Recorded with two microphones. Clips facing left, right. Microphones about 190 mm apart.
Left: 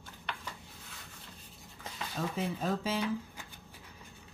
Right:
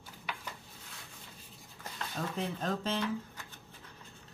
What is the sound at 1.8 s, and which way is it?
Speech, 5° left (ahead or behind).